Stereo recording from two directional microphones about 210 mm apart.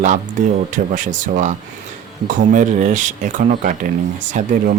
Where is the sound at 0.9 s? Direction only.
35° right (ahead or behind).